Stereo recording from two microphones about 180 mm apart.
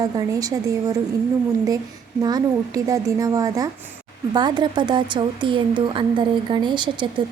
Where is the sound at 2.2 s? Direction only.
20° right (ahead or behind).